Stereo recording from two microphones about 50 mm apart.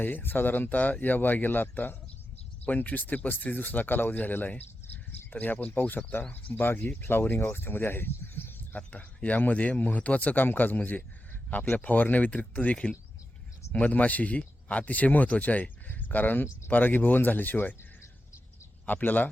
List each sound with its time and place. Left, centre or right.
0.0 s speech: left
8.9 s speech: left
18.9 s speech: left